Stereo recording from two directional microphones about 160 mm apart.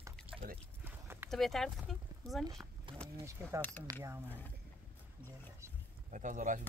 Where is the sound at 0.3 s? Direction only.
35° right (ahead or behind).